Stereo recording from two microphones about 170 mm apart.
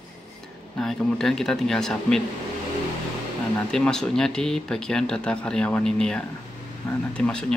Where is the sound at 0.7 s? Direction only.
5° left (ahead or behind).